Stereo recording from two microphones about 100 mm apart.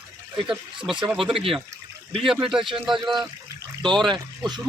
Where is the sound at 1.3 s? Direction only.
65° right (ahead or behind).